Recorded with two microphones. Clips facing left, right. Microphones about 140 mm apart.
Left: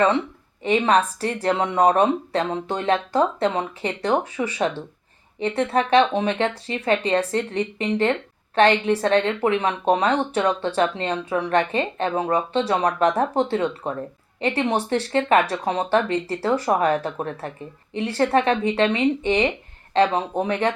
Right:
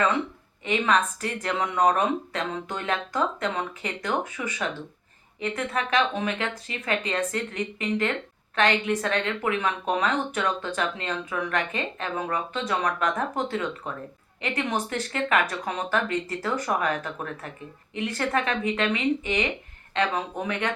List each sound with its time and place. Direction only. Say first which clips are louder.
0.6 s a woman's voice: left 5 dB; 35° left (ahead or behind)